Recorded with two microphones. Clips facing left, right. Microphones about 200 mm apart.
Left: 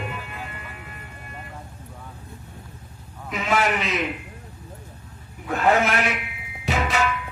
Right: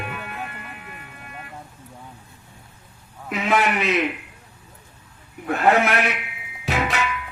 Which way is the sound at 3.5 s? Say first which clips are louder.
Right 2 dB; 60° right (ahead or behind).